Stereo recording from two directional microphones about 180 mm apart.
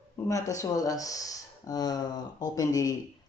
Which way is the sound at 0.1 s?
15° left (ahead or behind).